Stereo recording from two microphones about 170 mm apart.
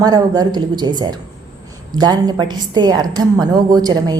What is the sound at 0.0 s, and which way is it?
A woman's voice, 20° right (ahead or behind).